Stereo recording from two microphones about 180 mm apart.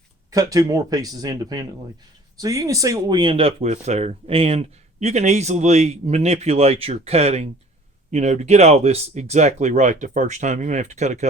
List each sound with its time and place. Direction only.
0.3 s speech: 20° right (ahead or behind); by 11.3 s 40° right (ahead or behind)